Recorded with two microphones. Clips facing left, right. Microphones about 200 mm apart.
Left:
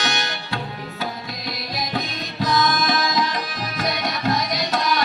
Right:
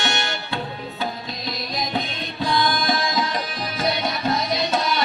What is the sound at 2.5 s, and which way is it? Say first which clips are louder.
Music: left 1 dB; 30° right (ahead or behind).